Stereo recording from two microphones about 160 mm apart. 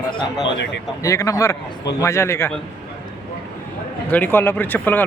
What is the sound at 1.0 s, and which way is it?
Speech, 20° left (ahead or behind).